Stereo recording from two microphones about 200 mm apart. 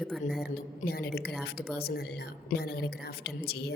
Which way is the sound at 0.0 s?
Centre (ahead or behind).